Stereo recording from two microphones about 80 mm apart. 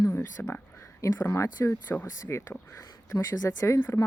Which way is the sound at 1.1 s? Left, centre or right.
Left.